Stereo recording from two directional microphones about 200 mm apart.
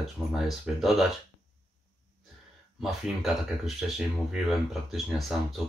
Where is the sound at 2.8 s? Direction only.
Centre (ahead or behind).